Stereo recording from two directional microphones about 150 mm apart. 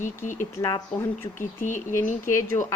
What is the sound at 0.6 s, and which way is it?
Speech, 15° left (ahead or behind).